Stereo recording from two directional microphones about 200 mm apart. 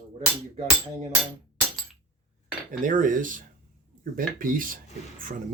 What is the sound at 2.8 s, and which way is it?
Speech, 40° right (ahead or behind).